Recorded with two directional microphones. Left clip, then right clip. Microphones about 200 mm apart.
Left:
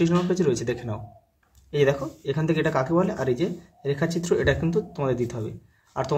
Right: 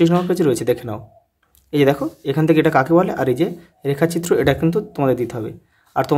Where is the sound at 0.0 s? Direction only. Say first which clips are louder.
Right 7 dB; 45° right (ahead or behind).